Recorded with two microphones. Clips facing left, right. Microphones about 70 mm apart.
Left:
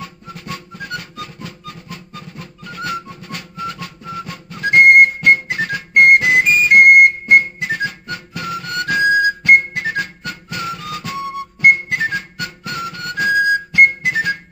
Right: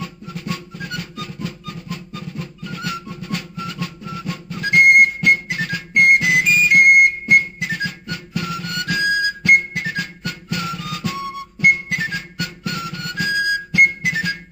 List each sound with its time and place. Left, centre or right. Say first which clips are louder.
0.0 s music: right 2 dB; left